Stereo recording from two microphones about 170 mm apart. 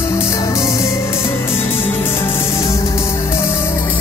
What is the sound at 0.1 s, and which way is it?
Music, 15° left (ahead or behind).